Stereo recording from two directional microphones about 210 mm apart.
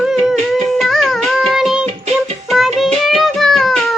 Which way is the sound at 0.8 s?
Centre (ahead or behind).